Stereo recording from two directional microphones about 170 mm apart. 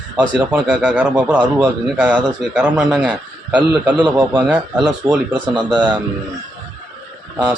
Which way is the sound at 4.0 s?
25° right (ahead or behind).